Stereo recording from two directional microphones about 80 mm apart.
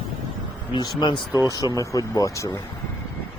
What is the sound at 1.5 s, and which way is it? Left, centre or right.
Speech, left.